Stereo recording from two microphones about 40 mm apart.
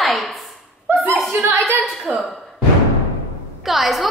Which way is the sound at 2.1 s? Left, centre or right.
Right.